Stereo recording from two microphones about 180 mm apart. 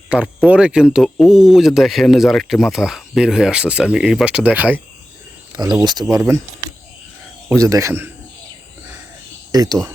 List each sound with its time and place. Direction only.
0.1 s speech: 10° right (ahead or behind)
5.5 s cricket: 20° right (ahead or behind)
5.8 s speech: 25° right (ahead or behind)
7.5 s speech: 15° right (ahead or behind)
9.5 s speech: 20° right (ahead or behind)